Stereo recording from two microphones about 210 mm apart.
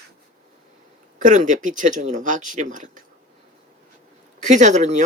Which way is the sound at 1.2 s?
35° right (ahead or behind).